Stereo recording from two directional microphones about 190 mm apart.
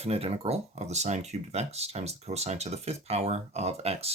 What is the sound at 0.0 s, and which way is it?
Speech, 30° right (ahead or behind).